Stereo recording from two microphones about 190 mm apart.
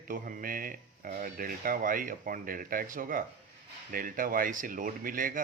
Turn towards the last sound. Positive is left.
turn(degrees=-45)  # may be behind; listen again after turning